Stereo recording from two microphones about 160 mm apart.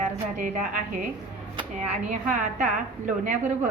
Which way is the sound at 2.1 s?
50° right (ahead or behind).